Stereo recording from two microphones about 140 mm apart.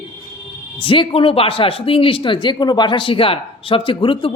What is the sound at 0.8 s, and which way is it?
Speech, 35° left (ahead or behind).